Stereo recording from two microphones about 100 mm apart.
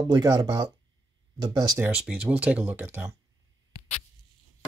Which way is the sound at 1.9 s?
10° right (ahead or behind).